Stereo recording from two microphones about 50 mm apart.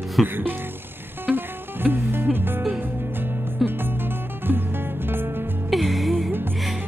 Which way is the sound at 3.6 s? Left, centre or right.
Right.